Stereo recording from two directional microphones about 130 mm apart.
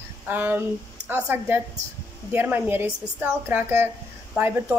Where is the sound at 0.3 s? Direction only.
15° right (ahead or behind).